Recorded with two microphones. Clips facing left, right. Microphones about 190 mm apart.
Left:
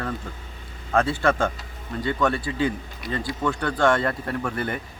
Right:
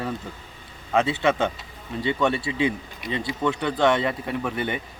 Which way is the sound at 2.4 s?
25° right (ahead or behind).